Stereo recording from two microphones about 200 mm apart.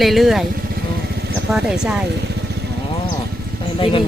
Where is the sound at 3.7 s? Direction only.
25° left (ahead or behind).